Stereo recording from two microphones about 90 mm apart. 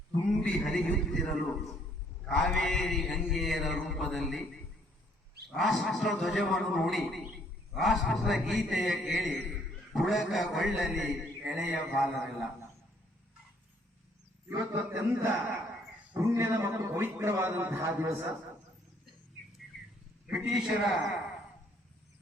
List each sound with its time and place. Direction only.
0.3 s a man's voice: 10° left (ahead or behind)
14.5 s a man's voice: 25° right (ahead or behind)
20.2 s a man's voice: 5° right (ahead or behind)